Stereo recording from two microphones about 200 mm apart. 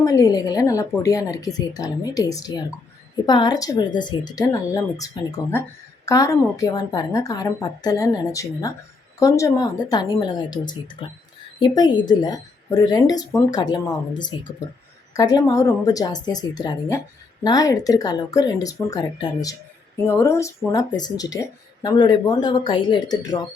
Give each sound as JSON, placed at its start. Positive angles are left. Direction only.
{"t": 0.0, "sound": "a woman's voice", "side_deg": 15}